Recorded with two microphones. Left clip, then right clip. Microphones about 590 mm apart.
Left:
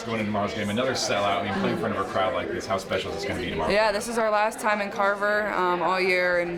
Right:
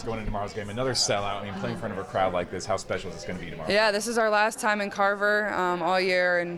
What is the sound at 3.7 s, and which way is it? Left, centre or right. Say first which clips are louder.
A woman's voice: right 1 dB; right.